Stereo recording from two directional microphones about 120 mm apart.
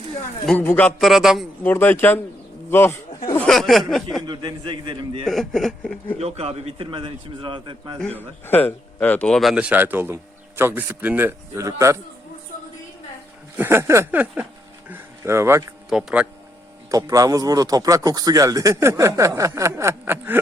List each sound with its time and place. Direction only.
0.6 s speech: 15° left (ahead or behind)
0.9 s speech: centre (ahead or behind)
1.6 s speech: 15° left (ahead or behind)
2.6 s bird: 20° left (ahead or behind)
3.3 s speech: 5° left (ahead or behind)
4.3 s a man's voice: 40° right (ahead or behind)
5.2 s speech: centre (ahead or behind)
6.1 s a man's voice: 60° right (ahead or behind)
8.0 s a man's voice: 15° left (ahead or behind); by 11.9 s 25° right (ahead or behind)
13.6 s a man's voice: 20° right (ahead or behind)
14.8 s a sound: 20° right (ahead or behind)
15.9 s speech: 5° right (ahead or behind)
16.9 s a man's voice: 30° right (ahead or behind)